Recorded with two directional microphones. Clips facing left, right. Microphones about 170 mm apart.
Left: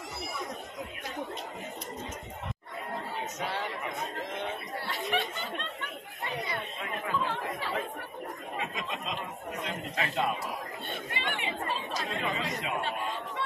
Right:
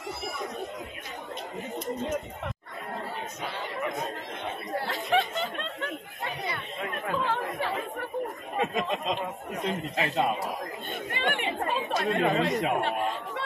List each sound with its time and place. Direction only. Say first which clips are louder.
7.1 s chatter: right 3 dB; 60° right (ahead or behind)
8.5 s snicker: right 10 dB; 45° right (ahead or behind)
9.9 s a man's voice: right 3 dB; 25° right (ahead or behind)
11.1 s speech: right 6 dB; 55° right (ahead or behind)